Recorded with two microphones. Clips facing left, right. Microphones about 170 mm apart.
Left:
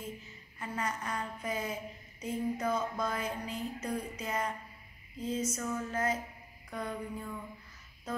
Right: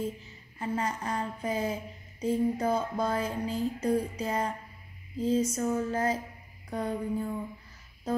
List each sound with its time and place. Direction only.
0.6 s a woman's voice: 30° right (ahead or behind)